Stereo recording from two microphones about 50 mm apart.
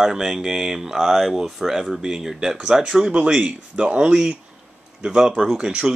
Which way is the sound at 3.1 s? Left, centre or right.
Right.